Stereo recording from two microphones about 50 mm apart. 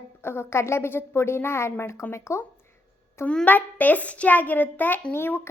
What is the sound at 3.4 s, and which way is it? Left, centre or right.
A child's voice, left.